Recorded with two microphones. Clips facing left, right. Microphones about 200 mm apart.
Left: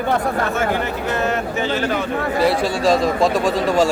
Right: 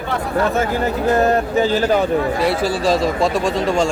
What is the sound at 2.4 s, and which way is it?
A man's voice, centre (ahead or behind).